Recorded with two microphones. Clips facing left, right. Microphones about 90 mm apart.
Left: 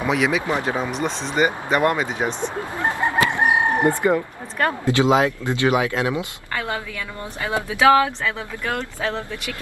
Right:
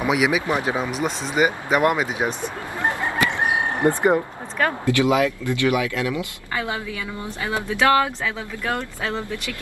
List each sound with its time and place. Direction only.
0.0 s speech: 10° right (ahead or behind)
2.8 s chicken: 20° left (ahead or behind)
4.9 s speech: 25° left (ahead or behind)
6.5 s a woman's voice: 15° right (ahead or behind)
7.4 s speech: 15° left (ahead or behind)
8.2 s speech: 15° right (ahead or behind)